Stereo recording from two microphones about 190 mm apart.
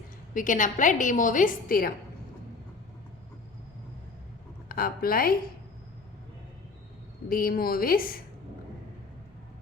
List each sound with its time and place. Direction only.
0.3 s a woman's voice: 45° left (ahead or behind)
4.7 s a woman's voice: 50° left (ahead or behind)
7.3 s a woman's voice: 50° left (ahead or behind)